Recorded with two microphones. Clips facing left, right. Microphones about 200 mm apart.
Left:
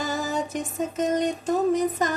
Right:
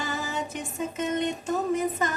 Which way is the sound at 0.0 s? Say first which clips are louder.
Left 4 dB; 40° left (ahead or behind).